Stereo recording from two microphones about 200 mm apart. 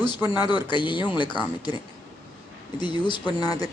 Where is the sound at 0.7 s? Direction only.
25° left (ahead or behind).